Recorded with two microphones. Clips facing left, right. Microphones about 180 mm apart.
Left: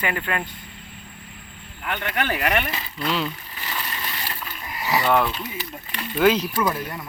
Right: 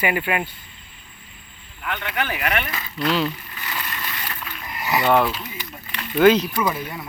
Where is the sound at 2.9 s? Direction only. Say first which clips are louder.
Right 4 dB; centre (ahead or behind).